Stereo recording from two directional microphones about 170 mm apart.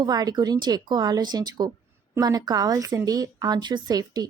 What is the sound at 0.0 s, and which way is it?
Speech, 25° right (ahead or behind).